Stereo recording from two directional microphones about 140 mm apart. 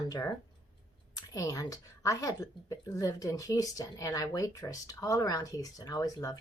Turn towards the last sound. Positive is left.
turn(degrees=25)  # may be behind; listen again after turning